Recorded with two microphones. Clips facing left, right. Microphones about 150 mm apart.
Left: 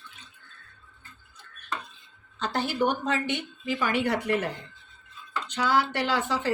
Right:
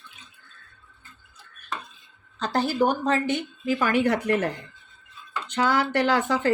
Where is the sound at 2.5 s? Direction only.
35° right (ahead or behind).